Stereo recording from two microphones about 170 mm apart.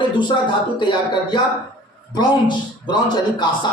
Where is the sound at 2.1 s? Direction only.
25° left (ahead or behind).